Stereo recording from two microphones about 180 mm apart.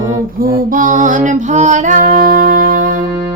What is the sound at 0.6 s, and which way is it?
Music, 50° right (ahead or behind).